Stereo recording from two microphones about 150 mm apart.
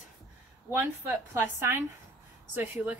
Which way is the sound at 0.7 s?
15° right (ahead or behind).